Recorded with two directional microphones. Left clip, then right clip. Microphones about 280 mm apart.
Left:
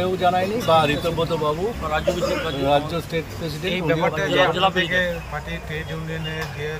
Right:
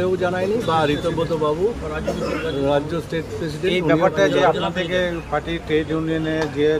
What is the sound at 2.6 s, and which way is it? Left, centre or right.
Speech, centre.